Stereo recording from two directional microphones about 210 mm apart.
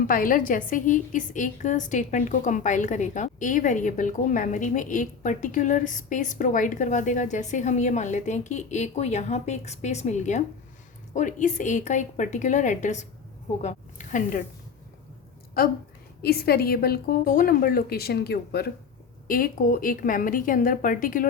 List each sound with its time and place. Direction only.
0.1 s a woman's voice: 40° left (ahead or behind)
15.6 s a woman's voice: 45° left (ahead or behind)